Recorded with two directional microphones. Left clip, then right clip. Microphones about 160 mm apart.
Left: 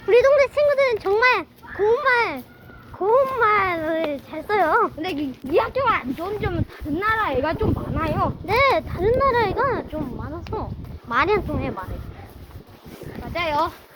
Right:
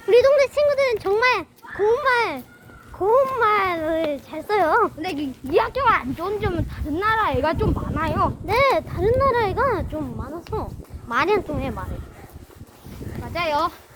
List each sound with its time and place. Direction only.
0.1 s a sound: 5° right (ahead or behind)
1.8 s a child's voice: 5° right (ahead or behind)
5.5 s speech: 55° right (ahead or behind)
8.4 s speech: 5° right (ahead or behind)
9.6 s speech: 25° right (ahead or behind)
11.1 s speech: 5° right (ahead or behind)
11.3 s a child's voice: 15° right (ahead or behind)
13.3 s speech: 35° right (ahead or behind)